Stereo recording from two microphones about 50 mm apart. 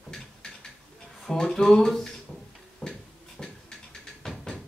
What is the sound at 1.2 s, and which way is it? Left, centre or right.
Speech, centre.